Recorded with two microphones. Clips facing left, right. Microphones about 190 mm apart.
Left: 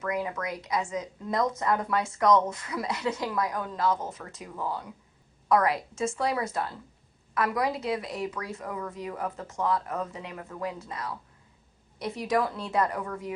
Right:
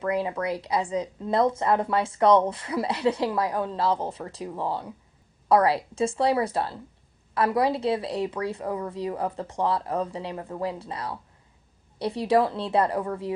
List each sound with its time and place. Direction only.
0.0 s a woman's voice: 30° right (ahead or behind)